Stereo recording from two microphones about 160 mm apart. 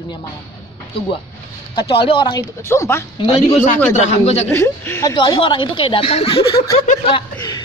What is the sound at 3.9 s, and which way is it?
Speech, 45° left (ahead or behind).